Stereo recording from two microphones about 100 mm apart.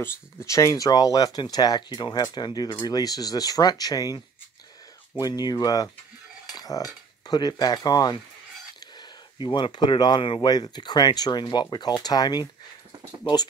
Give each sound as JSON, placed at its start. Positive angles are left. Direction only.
{"t": 0.0, "sound": "speech", "side_deg": 30}
{"t": 5.2, "sound": "speech", "side_deg": 40}
{"t": 6.5, "sound": "cutlery", "side_deg": 40}
{"t": 8.7, "sound": "speech", "side_deg": 50}